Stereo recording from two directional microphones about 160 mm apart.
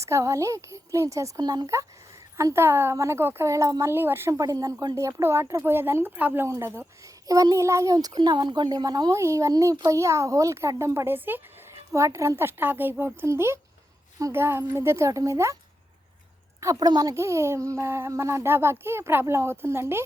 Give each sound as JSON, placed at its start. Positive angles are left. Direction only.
{"t": 0.0, "sound": "a woman's voice", "side_deg": -20}
{"t": 16.6, "sound": "speech", "side_deg": -20}